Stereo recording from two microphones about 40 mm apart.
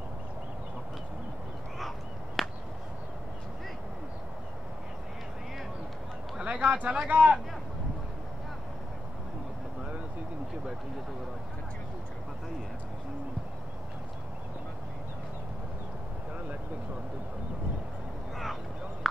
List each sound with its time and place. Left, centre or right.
1.8 s fowl: centre
6.4 s a sound: right
7.1 s speech: right